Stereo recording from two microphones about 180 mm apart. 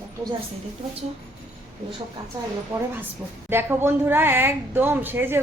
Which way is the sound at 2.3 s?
20° right (ahead or behind).